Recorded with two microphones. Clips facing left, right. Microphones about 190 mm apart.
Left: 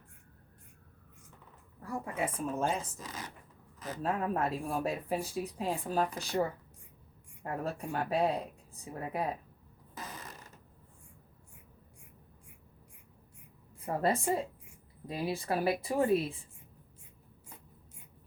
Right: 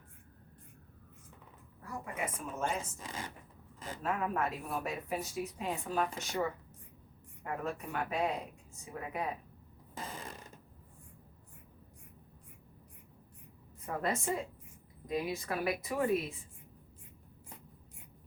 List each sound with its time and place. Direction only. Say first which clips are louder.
1.8 s a woman's voice: left 4 dB; 30° left (ahead or behind)
4.0 s speech: left 2 dB; 35° left (ahead or behind)
9.9 s a sound: right 2 dB; 30° right (ahead or behind)
13.8 s speech: left 4 dB; 30° left (ahead or behind)